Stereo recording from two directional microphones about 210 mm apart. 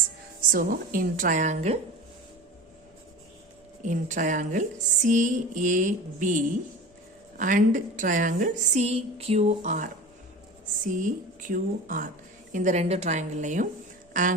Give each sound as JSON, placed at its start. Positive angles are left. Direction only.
{"t": 0.5, "sound": "speech", "side_deg": -40}
{"t": 3.8, "sound": "speech", "side_deg": -35}